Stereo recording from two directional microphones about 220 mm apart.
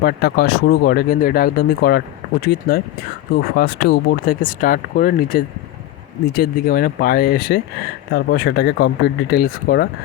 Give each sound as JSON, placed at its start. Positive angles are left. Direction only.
{"t": 0.0, "sound": "speech", "side_deg": 45}